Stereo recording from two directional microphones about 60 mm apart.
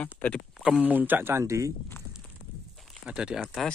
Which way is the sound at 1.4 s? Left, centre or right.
Right.